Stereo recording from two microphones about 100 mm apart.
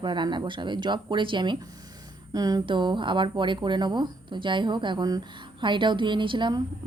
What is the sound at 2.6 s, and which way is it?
Speech, 50° right (ahead or behind).